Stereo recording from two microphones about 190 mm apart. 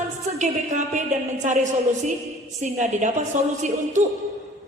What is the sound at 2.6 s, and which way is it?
Speech, 40° right (ahead or behind).